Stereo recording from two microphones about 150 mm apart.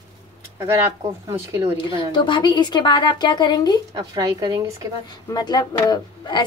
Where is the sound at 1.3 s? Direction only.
20° right (ahead or behind).